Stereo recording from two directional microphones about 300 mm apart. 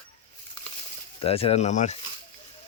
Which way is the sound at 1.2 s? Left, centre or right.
Centre.